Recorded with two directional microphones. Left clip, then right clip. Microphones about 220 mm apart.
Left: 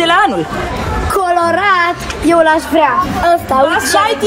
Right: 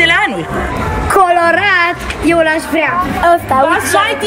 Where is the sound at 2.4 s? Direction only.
20° right (ahead or behind).